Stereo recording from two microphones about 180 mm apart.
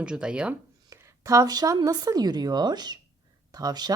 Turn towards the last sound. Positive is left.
turn(degrees=-20)  # may be behind; listen again after turning